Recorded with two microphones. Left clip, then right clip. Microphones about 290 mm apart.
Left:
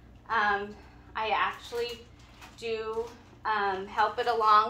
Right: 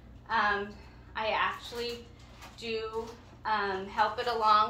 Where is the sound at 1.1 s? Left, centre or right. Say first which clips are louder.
Left 2 dB; centre.